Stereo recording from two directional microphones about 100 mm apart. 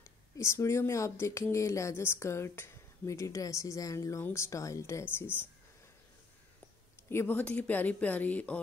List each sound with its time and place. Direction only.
0.4 s speech: 30° left (ahead or behind)
7.1 s speech: 20° left (ahead or behind)